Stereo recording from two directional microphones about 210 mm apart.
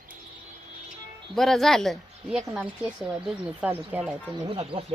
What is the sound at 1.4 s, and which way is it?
Speech, centre (ahead or behind).